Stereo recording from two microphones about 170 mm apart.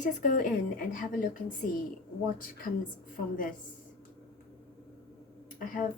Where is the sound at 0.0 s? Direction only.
50° left (ahead or behind).